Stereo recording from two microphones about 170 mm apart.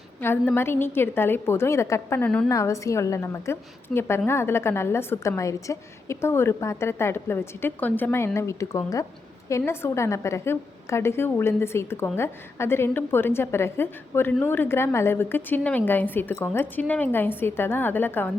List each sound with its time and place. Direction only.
0.2 s a woman's voice: 15° left (ahead or behind)